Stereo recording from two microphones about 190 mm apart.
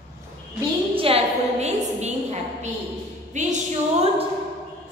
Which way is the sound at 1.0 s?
30° right (ahead or behind).